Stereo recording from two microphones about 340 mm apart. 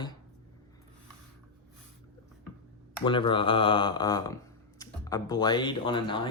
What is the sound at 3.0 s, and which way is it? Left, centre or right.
Speech, centre.